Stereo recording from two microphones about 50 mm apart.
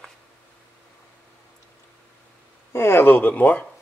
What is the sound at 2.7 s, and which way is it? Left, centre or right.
Speech, left.